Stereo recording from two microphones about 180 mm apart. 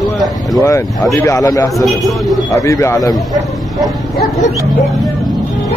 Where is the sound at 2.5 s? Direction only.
15° left (ahead or behind).